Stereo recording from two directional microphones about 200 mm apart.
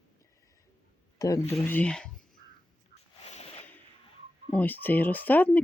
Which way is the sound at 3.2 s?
30° left (ahead or behind).